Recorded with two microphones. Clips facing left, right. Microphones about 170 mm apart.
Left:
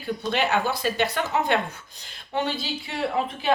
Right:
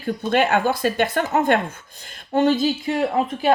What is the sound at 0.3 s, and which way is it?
Speech, 50° right (ahead or behind).